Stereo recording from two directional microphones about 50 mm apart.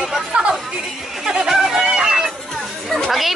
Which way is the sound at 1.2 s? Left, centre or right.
Centre.